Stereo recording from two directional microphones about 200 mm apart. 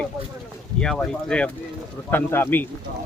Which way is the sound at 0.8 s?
5° left (ahead or behind).